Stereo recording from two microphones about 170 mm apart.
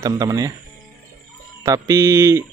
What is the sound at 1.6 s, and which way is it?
Speech, 20° right (ahead or behind).